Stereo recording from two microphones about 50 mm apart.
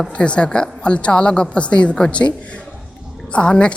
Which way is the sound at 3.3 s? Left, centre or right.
Left.